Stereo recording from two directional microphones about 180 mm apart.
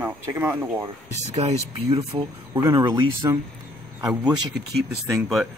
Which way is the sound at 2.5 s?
15° right (ahead or behind).